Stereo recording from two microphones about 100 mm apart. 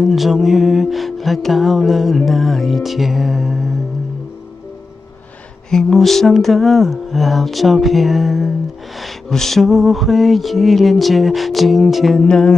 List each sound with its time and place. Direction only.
0.0 s music: centre (ahead or behind)
5.7 s music: 5° left (ahead or behind)